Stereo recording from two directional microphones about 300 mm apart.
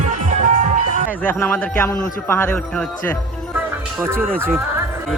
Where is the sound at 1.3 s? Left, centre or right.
Centre.